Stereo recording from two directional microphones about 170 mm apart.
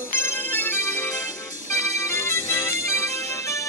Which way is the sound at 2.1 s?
15° left (ahead or behind).